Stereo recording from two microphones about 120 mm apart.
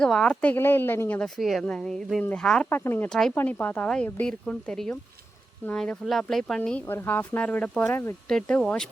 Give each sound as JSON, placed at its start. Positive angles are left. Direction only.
{"t": 0.0, "sound": "speech", "side_deg": 5}
{"t": 0.5, "sound": "speech", "side_deg": 20}
{"t": 1.4, "sound": "speech", "side_deg": 0}
{"t": 2.6, "sound": "speech", "side_deg": 20}
{"t": 3.1, "sound": "speech", "side_deg": 5}
{"t": 3.3, "sound": "speech", "side_deg": 15}
{"t": 6.6, "sound": "speech", "side_deg": 15}
{"t": 7.9, "sound": "speech", "side_deg": 20}
{"t": 8.3, "sound": "speech", "side_deg": 5}